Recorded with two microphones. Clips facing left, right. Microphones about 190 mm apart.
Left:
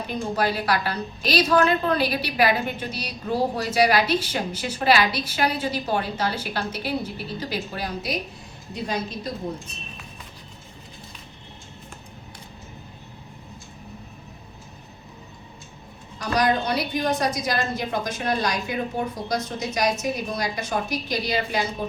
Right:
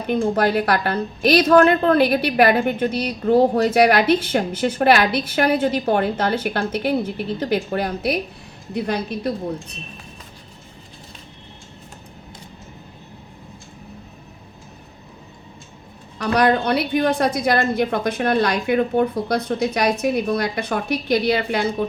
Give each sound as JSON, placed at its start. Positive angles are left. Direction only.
{"t": 0.1, "sound": "a woman's voice", "side_deg": -55}
{"t": 16.1, "sound": "a woman's voice", "side_deg": -60}